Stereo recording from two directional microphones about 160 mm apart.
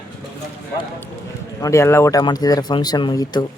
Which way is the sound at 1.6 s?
20° left (ahead or behind).